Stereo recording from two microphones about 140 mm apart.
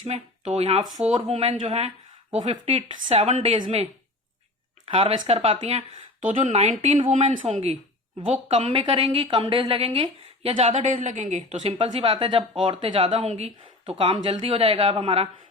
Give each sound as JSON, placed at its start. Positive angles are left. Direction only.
{"t": 0.0, "sound": "speech", "side_deg": -50}
{"t": 4.9, "sound": "speech", "side_deg": -40}
{"t": 6.2, "sound": "speech", "side_deg": -65}
{"t": 10.8, "sound": "a woman's voice", "side_deg": -60}
{"t": 11.8, "sound": "speech", "side_deg": -40}